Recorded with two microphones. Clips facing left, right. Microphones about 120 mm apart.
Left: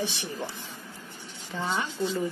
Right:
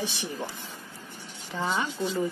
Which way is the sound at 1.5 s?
10° right (ahead or behind).